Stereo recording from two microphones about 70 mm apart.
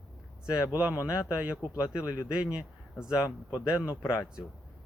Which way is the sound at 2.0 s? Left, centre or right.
Left.